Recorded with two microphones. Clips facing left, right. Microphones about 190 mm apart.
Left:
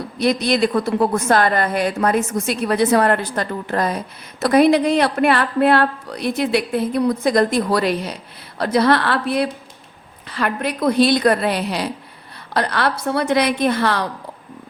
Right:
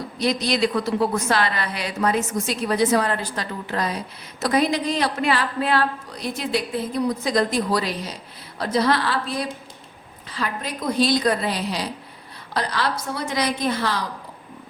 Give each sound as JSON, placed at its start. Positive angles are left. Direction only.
{"t": 0.2, "sound": "a woman's voice", "side_deg": 55}